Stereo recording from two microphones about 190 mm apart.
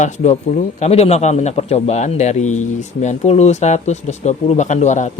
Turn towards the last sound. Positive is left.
turn(degrees=40)  # may be behind; listen again after turning